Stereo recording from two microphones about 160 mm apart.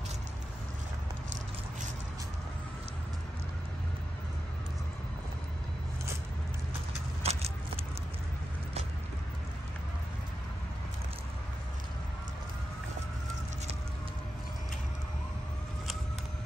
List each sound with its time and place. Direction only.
7.2 s vehicle: 40° right (ahead or behind)